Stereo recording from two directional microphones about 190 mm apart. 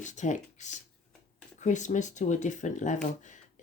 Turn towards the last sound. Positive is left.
turn(degrees=40)  # may be behind; listen again after turning